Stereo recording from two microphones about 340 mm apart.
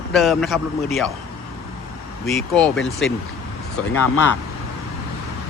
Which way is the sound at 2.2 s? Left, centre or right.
Centre.